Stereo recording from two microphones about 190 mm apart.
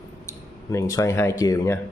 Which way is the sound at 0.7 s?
15° left (ahead or behind).